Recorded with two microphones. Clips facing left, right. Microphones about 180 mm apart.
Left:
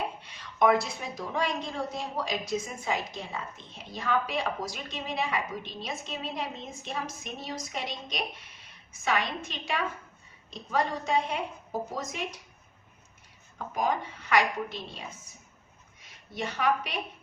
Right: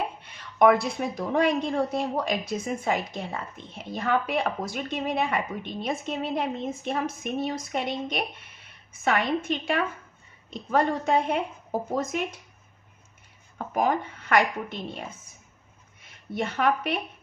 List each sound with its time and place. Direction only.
0.2 s a woman's voice: 55° right (ahead or behind)
13.7 s a woman's voice: 55° right (ahead or behind)